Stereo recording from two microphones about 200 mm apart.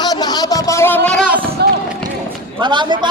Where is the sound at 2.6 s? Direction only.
25° right (ahead or behind).